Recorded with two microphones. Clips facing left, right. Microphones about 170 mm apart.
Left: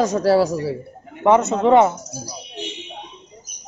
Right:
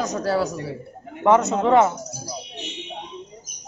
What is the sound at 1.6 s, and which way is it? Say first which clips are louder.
Speech: left 4 dB; 15° left (ahead or behind).